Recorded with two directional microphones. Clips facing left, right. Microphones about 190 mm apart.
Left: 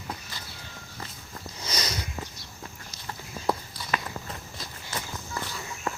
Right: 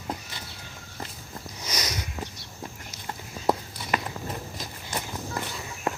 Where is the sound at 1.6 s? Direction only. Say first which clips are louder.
Even; 15° right (ahead or behind).